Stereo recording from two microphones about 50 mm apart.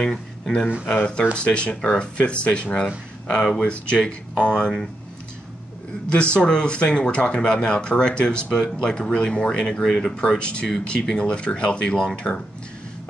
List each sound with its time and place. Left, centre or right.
0.0 s speech: centre
6.0 s speech: left